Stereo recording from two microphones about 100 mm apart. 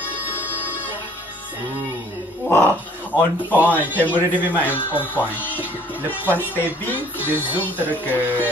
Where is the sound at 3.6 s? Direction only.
20° left (ahead or behind).